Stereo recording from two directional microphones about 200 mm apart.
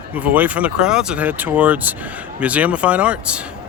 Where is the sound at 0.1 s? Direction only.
10° right (ahead or behind).